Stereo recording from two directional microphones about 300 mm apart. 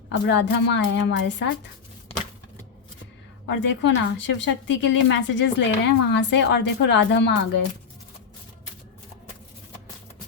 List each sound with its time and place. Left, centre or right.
0.3 s a woman's voice: left
3.4 s a woman's voice: left